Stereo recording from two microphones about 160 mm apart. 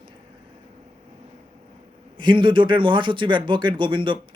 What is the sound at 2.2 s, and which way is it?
Speech, 30° right (ahead or behind).